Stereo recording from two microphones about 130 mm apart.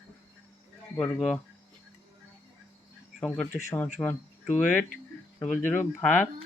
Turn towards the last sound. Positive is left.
turn(degrees=15)  # may be behind; listen again after turning